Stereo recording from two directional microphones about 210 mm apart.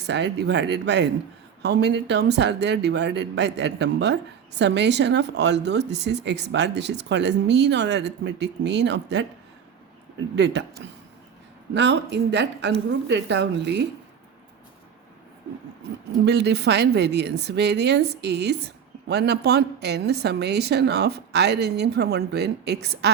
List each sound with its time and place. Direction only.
0.1 s speech: 55° right (ahead or behind)
16.2 s a woman's voice: 50° right (ahead or behind)